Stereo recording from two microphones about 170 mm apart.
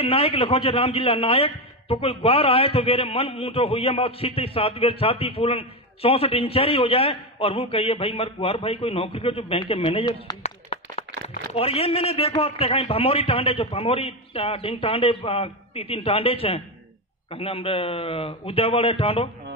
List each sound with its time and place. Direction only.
0.0 s a man's voice: 35° left (ahead or behind)
10.4 s a sound: 35° left (ahead or behind)
11.2 s a man's voice: 35° left (ahead or behind)